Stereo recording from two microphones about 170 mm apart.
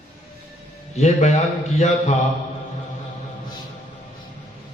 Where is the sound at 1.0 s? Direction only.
40° left (ahead or behind).